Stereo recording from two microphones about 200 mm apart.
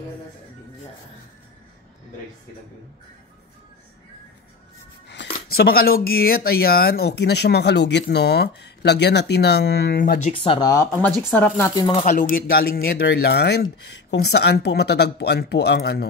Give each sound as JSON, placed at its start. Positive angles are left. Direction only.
{"t": 5.0, "sound": "music", "side_deg": 60}
{"t": 5.5, "sound": "speech", "side_deg": 50}
{"t": 10.3, "sound": "speech", "side_deg": 25}
{"t": 11.0, "sound": "speech", "side_deg": 5}
{"t": 11.9, "sound": "speech", "side_deg": 40}